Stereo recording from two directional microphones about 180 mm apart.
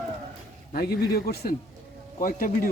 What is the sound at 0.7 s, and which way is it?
A man's voice, 60° left (ahead or behind).